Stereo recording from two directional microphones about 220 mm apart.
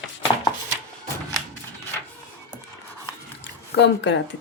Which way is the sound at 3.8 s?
55° left (ahead or behind).